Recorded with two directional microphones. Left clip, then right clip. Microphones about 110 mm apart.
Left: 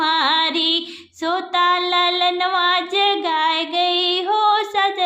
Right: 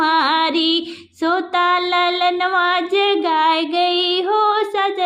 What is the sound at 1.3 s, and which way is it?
Female singing, 30° right (ahead or behind).